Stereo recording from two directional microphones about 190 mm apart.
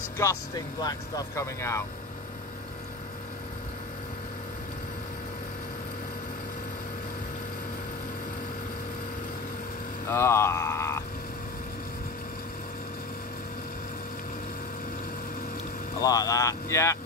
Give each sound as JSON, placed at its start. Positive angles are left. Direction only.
{"t": 0.8, "sound": "speech", "side_deg": 15}
{"t": 10.0, "sound": "speech", "side_deg": 15}
{"t": 16.0, "sound": "speech", "side_deg": 20}